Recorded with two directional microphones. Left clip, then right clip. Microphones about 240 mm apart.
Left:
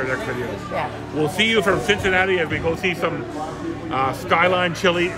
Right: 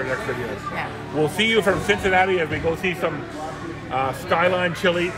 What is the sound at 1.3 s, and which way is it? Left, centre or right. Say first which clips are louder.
Speech: left 2 dB; centre.